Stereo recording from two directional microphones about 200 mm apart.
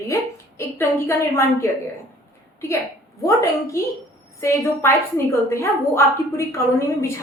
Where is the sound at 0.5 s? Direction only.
15° left (ahead or behind).